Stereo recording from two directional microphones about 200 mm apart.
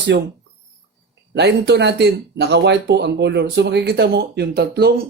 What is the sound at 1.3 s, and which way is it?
Speech, 55° right (ahead or behind).